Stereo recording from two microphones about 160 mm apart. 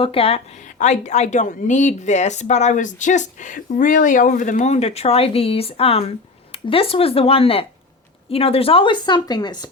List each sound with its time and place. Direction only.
0.0 s a woman's voice: 35° left (ahead or behind)